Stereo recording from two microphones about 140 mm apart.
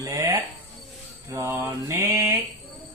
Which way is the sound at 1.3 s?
20° right (ahead or behind).